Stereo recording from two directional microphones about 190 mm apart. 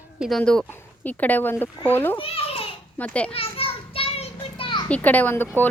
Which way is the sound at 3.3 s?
30° left (ahead or behind).